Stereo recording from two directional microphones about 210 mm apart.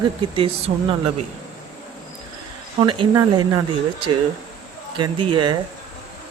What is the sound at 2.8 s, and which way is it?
Speech, 20° right (ahead or behind).